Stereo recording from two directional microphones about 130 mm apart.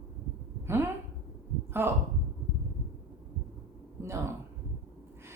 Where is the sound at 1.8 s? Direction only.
15° right (ahead or behind).